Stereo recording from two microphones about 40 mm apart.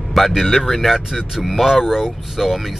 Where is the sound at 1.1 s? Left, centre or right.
Centre.